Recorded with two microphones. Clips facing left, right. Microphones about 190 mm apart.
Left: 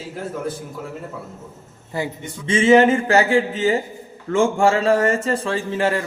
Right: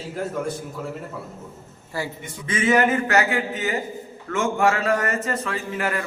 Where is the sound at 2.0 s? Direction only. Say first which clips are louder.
Left 4 dB; 20° left (ahead or behind).